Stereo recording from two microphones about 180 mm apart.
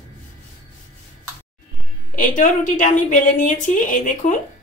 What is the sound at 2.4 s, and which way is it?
Speech, 45° left (ahead or behind).